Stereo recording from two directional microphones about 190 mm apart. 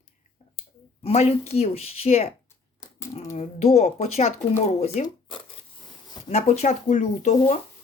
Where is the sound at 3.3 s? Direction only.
35° left (ahead or behind).